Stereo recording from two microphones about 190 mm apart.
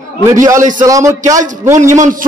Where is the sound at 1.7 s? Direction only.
40° right (ahead or behind).